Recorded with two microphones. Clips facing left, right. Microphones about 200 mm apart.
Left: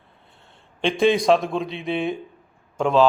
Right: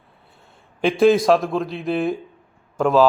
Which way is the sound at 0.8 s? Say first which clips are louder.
Right 4 dB; 5° right (ahead or behind).